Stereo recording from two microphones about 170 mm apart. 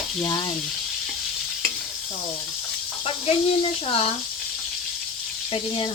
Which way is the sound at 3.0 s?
35° left (ahead or behind).